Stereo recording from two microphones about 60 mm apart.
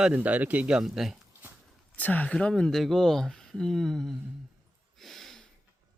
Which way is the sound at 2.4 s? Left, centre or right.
Centre.